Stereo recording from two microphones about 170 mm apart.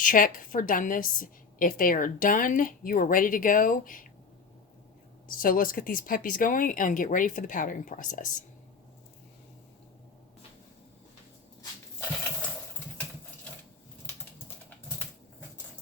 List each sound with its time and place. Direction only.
0.0 s a woman's voice: 55° left (ahead or behind)
5.4 s a woman's voice: 55° left (ahead or behind)